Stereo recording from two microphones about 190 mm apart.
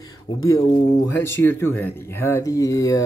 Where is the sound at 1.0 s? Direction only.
15° left (ahead or behind).